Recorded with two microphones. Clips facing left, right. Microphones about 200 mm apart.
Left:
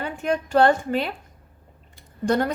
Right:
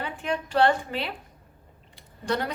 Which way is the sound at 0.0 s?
45° left (ahead or behind).